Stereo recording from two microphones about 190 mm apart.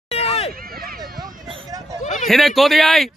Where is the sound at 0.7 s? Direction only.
50° right (ahead or behind).